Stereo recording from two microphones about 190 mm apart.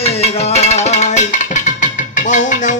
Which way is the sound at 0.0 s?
35° left (ahead or behind).